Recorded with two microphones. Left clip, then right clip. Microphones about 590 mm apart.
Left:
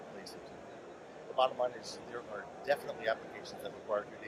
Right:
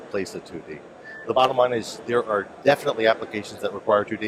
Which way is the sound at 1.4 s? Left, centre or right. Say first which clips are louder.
Right 14 dB; right.